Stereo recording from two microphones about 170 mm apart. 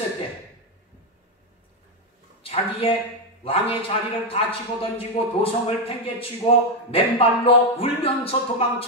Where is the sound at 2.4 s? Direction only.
35° left (ahead or behind).